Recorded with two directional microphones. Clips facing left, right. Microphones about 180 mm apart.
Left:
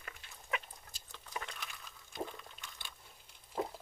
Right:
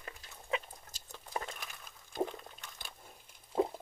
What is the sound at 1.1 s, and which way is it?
Biting, 45° right (ahead or behind).